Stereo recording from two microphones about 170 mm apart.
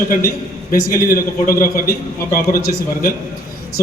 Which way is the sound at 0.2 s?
60° left (ahead or behind).